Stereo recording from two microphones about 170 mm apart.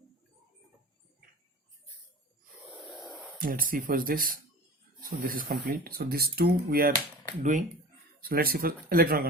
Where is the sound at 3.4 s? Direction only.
55° right (ahead or behind).